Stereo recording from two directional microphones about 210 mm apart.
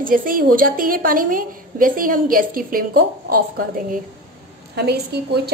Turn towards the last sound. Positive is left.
turn(degrees=-50)  # may be behind; listen again after turning